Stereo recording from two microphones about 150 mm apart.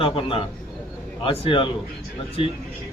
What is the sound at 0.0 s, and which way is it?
A man's voice, 35° left (ahead or behind).